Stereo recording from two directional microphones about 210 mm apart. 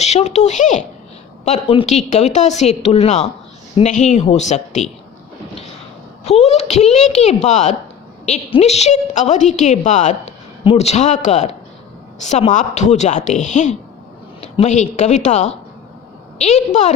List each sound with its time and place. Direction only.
0.0 s a woman's voice: 30° left (ahead or behind)
6.2 s a woman's voice: 30° left (ahead or behind)